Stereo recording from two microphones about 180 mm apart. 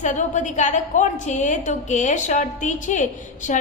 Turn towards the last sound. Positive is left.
turn(degrees=45)  # may be behind; listen again after turning